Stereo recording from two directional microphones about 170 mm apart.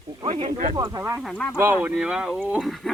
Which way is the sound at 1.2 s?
5° left (ahead or behind).